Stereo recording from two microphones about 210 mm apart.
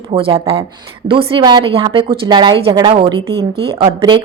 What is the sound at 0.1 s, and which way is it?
A woman's voice, 25° right (ahead or behind).